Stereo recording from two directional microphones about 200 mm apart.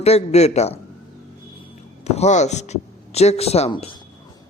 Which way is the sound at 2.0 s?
35° left (ahead or behind).